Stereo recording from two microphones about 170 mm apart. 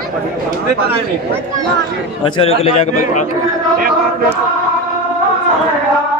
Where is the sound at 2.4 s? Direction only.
35° left (ahead or behind).